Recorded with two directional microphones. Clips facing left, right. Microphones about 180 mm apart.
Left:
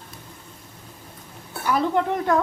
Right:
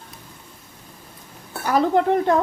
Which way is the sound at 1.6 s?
40° right (ahead or behind).